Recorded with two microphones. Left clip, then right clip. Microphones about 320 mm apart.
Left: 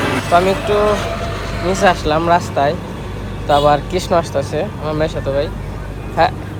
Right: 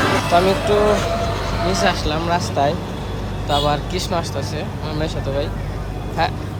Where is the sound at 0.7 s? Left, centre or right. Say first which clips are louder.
Left 1 dB; right.